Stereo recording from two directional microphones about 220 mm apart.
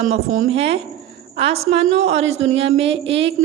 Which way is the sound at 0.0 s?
35° right (ahead or behind).